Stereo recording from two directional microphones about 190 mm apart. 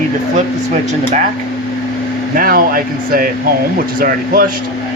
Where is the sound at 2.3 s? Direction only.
50° right (ahead or behind).